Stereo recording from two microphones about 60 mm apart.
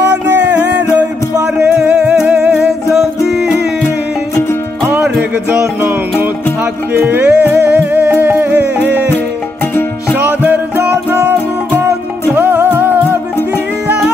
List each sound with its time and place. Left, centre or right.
1.8 s music: centre
2.5 s music: centre
6.9 s music: right
10.2 s music: right
12.4 s music: right